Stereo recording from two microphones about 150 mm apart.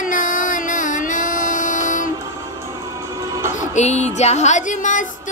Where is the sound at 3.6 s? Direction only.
50° left (ahead or behind).